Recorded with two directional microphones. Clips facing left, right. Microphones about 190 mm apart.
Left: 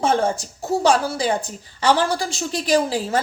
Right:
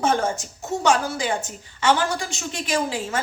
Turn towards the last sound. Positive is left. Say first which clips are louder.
# left 5 dB
turn(degrees=35)  # may be behind; listen again after turning